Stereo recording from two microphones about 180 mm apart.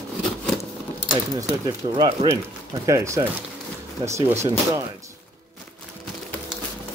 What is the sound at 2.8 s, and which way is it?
Speech, 15° right (ahead or behind).